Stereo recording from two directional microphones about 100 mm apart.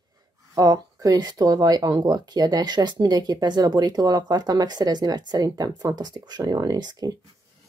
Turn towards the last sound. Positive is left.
turn(degrees=-40)  # may be behind; listen again after turning